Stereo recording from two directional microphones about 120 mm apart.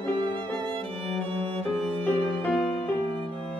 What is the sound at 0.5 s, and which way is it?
Violin, 5° left (ahead or behind).